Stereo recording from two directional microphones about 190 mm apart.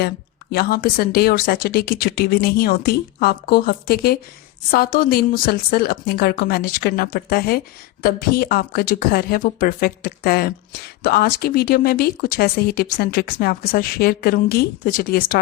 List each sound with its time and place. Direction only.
0.5 s a woman's voice: 55° left (ahead or behind)